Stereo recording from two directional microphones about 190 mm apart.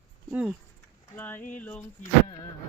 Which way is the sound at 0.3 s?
5° right (ahead or behind).